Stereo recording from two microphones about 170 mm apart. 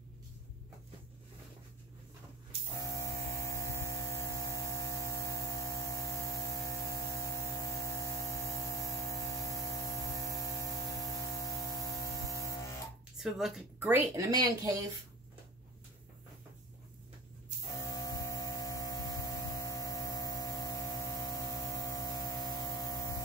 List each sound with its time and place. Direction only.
2.8 s mains hum: 20° left (ahead or behind)
13.2 s speech: centre (ahead or behind); by 14.9 s 20° right (ahead or behind)
17.7 s hum: 20° left (ahead or behind)